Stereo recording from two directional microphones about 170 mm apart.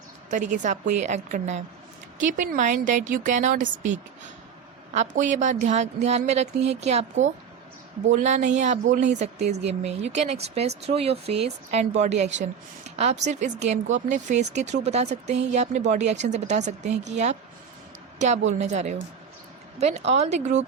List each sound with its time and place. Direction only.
0.3 s speech: 45° right (ahead or behind)
4.9 s speech: 45° right (ahead or behind)
18.6 s speech: 45° right (ahead or behind)
20.1 s speech: 40° right (ahead or behind)